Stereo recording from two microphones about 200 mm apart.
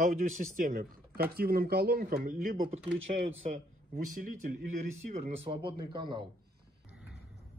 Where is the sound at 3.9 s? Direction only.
45° right (ahead or behind).